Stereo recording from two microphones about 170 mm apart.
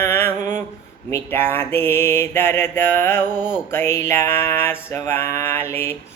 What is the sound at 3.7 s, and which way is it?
Music, 15° left (ahead or behind).